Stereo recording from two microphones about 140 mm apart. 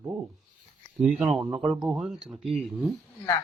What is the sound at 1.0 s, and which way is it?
Speech, centre (ahead or behind).